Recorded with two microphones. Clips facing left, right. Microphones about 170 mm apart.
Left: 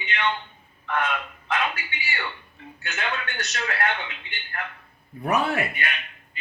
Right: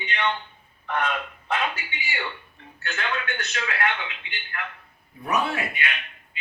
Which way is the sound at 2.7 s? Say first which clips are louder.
Right 2 dB; 15° left (ahead or behind).